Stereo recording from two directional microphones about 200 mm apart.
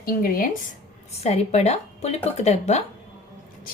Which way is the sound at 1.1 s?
35° left (ahead or behind).